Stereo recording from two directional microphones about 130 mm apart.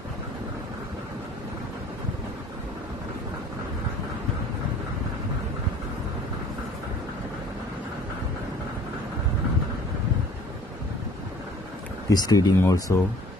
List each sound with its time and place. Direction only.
12.1 s speech: 30° left (ahead or behind)